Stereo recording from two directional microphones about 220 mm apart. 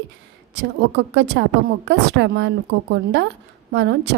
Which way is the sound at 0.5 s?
50° right (ahead or behind).